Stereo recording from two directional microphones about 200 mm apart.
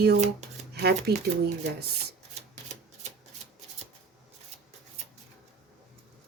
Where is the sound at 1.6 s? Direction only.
55° right (ahead or behind).